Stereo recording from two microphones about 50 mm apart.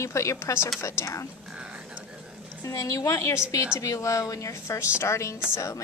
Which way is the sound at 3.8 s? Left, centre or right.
Left.